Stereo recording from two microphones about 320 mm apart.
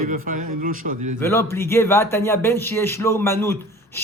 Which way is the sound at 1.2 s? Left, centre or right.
Centre.